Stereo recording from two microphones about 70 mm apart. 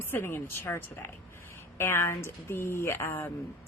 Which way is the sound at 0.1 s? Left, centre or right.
Left.